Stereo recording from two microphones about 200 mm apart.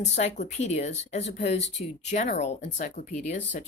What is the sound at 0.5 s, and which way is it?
Speech, 35° left (ahead or behind).